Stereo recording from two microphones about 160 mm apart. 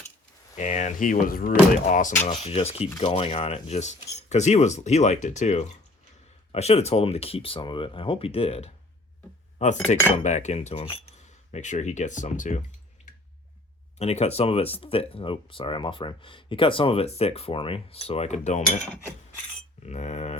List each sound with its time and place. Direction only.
0.5 s speech: 50° left (ahead or behind)
2.4 s speech: 40° left (ahead or behind)
14.0 s speech: 40° left (ahead or behind)